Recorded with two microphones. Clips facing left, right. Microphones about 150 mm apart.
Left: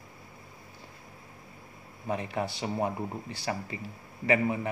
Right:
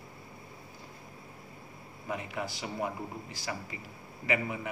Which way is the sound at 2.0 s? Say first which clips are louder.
Left 5 dB; 30° left (ahead or behind).